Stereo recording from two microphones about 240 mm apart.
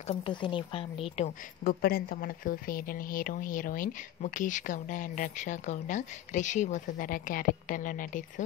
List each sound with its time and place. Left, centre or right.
0.0 s a woman's voice: left
1.1 s a woman's voice: left